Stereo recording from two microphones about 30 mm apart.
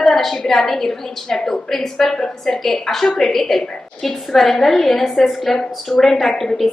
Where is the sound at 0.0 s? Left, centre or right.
Centre.